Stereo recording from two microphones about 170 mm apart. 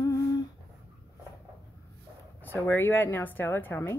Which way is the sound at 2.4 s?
10° left (ahead or behind).